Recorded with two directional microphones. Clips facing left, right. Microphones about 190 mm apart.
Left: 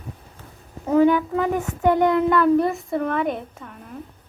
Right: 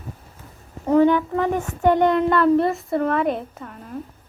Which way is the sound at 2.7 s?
Centre (ahead or behind).